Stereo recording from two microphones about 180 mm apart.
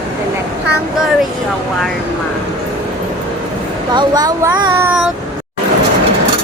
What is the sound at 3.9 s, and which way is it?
Speech, 25° right (ahead or behind).